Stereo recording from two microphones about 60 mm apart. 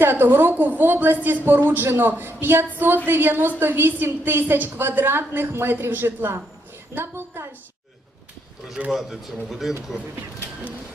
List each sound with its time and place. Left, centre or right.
0.0 s a woman's voice: right
8.9 s speech: centre